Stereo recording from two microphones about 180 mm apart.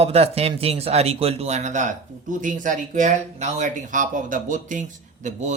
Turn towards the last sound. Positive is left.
turn(degrees=-40)  # may be behind; listen again after turning